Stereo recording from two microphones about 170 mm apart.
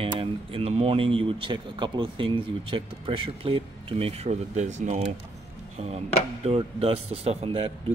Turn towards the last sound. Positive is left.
turn(degrees=-35)  # may be behind; listen again after turning